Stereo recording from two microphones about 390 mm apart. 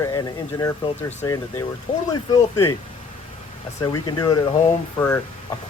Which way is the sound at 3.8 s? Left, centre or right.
Centre.